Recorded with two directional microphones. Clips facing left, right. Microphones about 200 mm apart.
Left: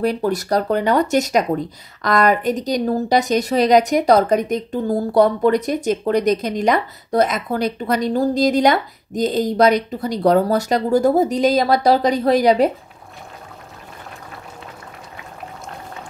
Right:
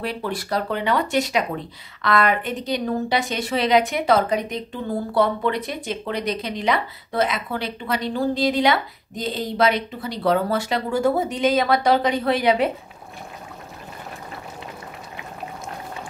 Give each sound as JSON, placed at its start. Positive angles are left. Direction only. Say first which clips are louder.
{"t": 0.0, "sound": "speech", "louder": "left 8 dB", "side_deg": 40}